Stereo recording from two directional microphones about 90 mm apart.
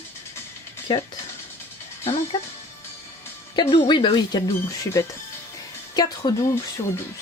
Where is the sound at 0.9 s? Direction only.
80° left.